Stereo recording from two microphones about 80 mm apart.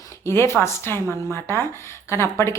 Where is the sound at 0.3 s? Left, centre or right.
Left.